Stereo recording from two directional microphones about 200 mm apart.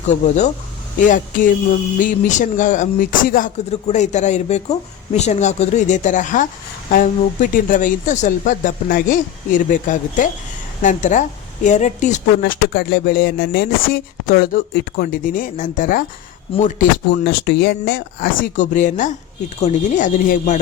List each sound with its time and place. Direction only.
0.1 s speech: 35° left (ahead or behind)
12.4 s speech: 50° left (ahead or behind)
17.2 s speech: 55° left (ahead or behind)